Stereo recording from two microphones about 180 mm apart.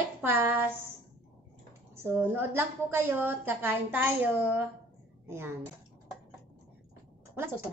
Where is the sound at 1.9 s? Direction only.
15° right (ahead or behind).